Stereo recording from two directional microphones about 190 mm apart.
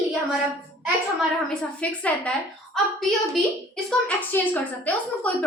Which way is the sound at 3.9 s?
5° left (ahead or behind).